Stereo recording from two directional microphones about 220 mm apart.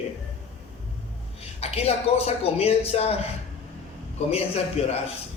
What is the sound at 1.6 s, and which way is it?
A man's voice, 25° left (ahead or behind).